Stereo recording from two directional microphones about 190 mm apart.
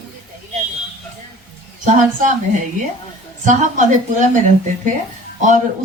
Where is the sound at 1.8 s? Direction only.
40° right (ahead or behind).